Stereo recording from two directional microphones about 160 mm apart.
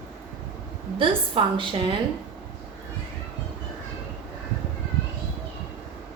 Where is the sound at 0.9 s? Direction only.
30° right (ahead or behind).